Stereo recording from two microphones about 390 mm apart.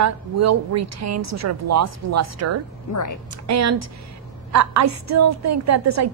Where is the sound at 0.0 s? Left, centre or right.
Right.